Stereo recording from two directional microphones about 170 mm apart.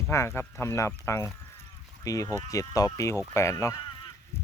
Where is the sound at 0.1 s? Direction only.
15° left (ahead or behind).